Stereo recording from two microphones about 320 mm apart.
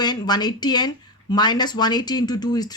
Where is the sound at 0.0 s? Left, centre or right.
Centre.